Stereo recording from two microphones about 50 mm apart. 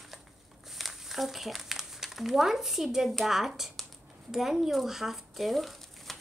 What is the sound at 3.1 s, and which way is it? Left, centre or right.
Speech, centre.